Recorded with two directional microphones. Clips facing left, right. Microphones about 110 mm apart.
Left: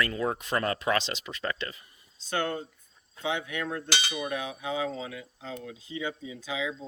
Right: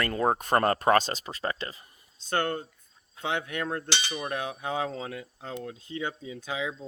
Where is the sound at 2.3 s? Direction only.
45° right (ahead or behind).